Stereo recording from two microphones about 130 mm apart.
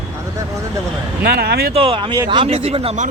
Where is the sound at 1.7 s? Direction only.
40° right (ahead or behind).